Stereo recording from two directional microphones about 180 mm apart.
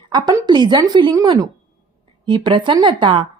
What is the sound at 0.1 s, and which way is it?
A woman's voice, 20° right (ahead or behind).